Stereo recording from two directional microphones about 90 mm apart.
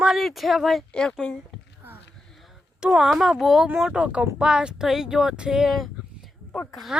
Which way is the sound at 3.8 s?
5° right (ahead or behind).